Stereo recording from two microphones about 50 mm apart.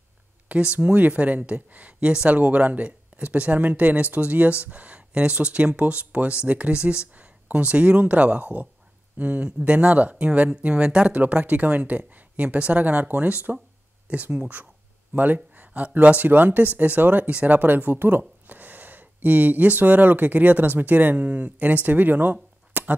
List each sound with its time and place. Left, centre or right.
0.5 s speech: right